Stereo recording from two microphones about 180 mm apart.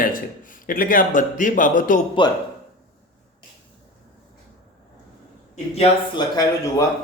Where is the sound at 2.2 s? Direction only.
25° left (ahead or behind).